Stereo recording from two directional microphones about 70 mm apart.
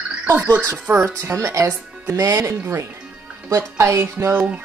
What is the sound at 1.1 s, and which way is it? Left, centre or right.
Speech, right.